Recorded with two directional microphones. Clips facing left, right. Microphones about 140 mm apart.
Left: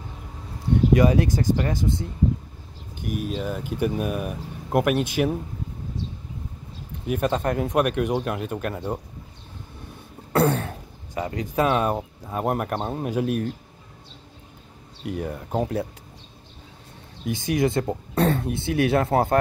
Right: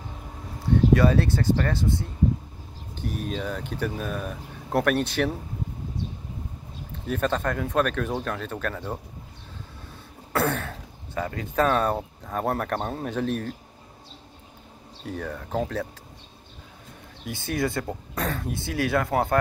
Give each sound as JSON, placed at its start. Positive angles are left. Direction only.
{"t": 0.9, "sound": "speech", "side_deg": 15}
{"t": 7.1, "sound": "speech", "side_deg": 15}
{"t": 10.5, "sound": "a sound", "side_deg": 25}
{"t": 12.3, "sound": "speech", "side_deg": 15}
{"t": 15.3, "sound": "speech", "side_deg": 15}
{"t": 17.2, "sound": "speech", "side_deg": 20}